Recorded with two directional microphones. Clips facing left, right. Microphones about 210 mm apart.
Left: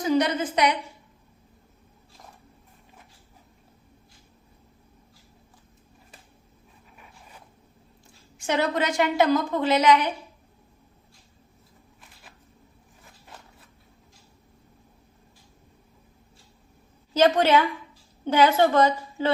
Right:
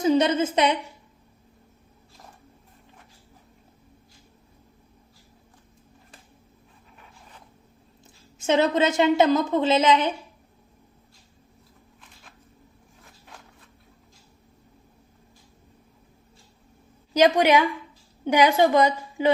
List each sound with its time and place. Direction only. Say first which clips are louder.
0.0 s a woman's voice: right 3 dB; 25° right (ahead or behind)
8.4 s a woman's voice: right 4 dB; 20° right (ahead or behind)
17.2 s a woman's voice: right 1 dB; 15° right (ahead or behind)